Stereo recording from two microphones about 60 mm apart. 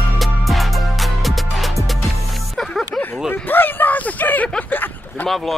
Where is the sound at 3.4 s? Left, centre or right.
Left.